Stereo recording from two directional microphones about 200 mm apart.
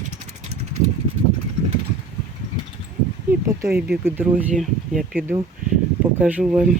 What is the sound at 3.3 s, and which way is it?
Speech, 10° right (ahead or behind).